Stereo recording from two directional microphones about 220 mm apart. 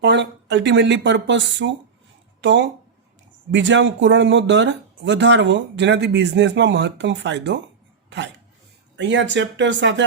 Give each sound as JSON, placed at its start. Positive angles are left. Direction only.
{"t": 0.0, "sound": "speech", "side_deg": -55}
{"t": 9.0, "sound": "speech", "side_deg": -55}